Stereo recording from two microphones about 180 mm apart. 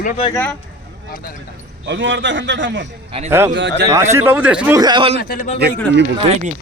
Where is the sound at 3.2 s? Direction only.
15° right (ahead or behind).